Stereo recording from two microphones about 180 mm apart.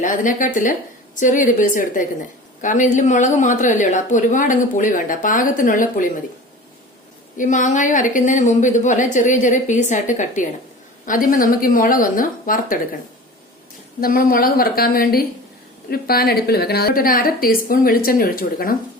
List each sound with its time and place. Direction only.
0.0 s a woman's voice: 45° left (ahead or behind)
7.3 s a woman's voice: 45° left (ahead or behind)
14.0 s a woman's voice: 55° left (ahead or behind)